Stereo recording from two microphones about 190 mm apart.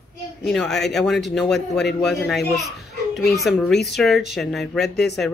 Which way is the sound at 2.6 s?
Centre (ahead or behind).